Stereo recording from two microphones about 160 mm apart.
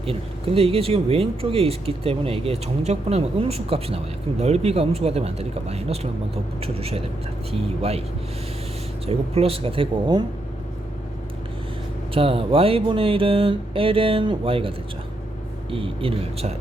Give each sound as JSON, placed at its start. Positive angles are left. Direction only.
{"t": 0.0, "sound": "speech", "side_deg": -35}
{"t": 9.0, "sound": "speech", "side_deg": -40}
{"t": 12.1, "sound": "speech", "side_deg": -35}
{"t": 15.7, "sound": "speech", "side_deg": -35}